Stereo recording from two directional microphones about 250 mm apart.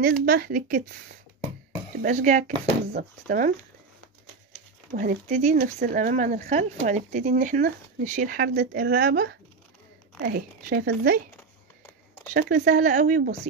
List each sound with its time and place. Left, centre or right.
0.2 s speech: right
2.0 s speech: right
4.9 s speech: right
12.4 s speech: right